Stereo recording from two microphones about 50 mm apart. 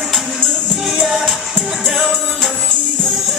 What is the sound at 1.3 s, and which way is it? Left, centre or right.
Music, centre.